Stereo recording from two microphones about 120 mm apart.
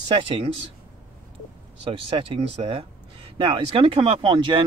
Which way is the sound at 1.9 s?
50° right (ahead or behind).